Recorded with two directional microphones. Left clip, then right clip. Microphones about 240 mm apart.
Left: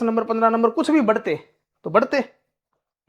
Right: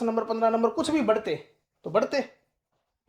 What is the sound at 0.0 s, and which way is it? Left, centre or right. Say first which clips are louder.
Speech: left 6 dB; left.